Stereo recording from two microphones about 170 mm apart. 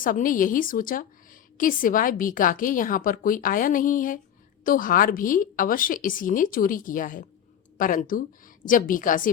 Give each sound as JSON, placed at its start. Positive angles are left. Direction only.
{"t": 0.0, "sound": "a woman's voice", "side_deg": 55}